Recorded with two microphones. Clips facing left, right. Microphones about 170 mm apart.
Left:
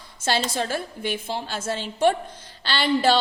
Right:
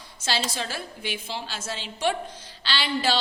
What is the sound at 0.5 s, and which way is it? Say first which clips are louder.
A woman's voice: left 6 dB; 50° left (ahead or behind).